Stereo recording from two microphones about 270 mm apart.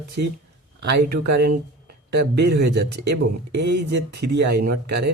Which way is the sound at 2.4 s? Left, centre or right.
Right.